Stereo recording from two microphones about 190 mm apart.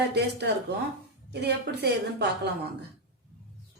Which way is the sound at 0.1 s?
60° right (ahead or behind).